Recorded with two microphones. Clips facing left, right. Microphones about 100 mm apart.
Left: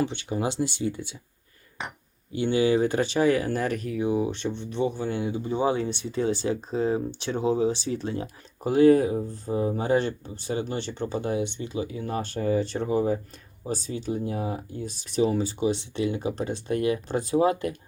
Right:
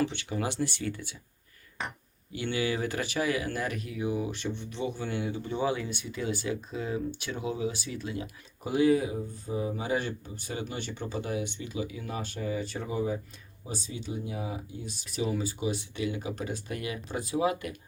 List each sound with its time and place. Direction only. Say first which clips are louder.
0.0 s speech: left 3 dB; 20° left (ahead or behind)
2.3 s speech: left 8 dB; 25° left (ahead or behind)
4.0 s speech: left 5 dB; 30° left (ahead or behind)
8.9 s speech: left 7 dB; 50° left (ahead or behind)
9.1 s speech: left 6 dB; 40° left (ahead or behind)
14.8 s speech: left 8 dB; 35° left (ahead or behind)